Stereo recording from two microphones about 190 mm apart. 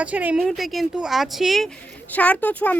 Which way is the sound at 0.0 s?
10° right (ahead or behind).